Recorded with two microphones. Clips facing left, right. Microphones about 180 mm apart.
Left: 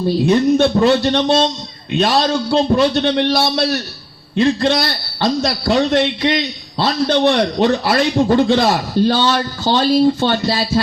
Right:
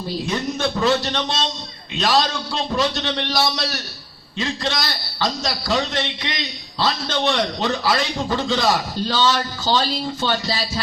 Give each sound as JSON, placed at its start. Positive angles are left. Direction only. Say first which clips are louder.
{"t": 0.3, "sound": "a man's voice", "louder": "left 12 dB", "side_deg": 60}